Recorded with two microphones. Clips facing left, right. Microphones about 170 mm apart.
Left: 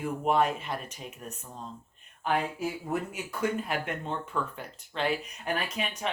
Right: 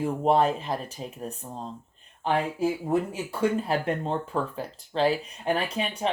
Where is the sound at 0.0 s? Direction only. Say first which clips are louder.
Right 4 dB; 30° right (ahead or behind).